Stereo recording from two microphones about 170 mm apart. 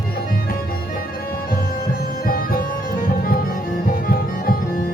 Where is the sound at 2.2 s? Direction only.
60° left (ahead or behind).